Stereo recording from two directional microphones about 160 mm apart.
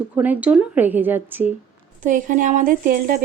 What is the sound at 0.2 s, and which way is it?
A woman's voice, 10° right (ahead or behind).